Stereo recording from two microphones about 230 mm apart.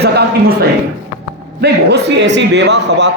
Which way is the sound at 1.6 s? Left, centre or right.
Right.